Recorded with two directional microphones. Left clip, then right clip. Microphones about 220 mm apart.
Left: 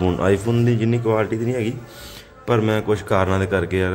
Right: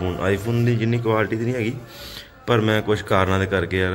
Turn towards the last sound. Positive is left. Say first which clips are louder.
# left 1 dB
turn(degrees=10)  # may be behind; listen again after turning